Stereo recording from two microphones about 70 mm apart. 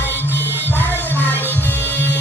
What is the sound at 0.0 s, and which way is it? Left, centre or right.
Music, left.